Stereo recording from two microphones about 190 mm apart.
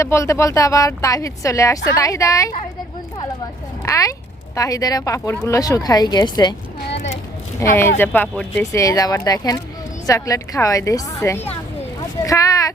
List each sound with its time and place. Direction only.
0.0 s speech: 15° left (ahead or behind)
3.8 s speech: 15° left (ahead or behind)
7.6 s speech: 10° left (ahead or behind)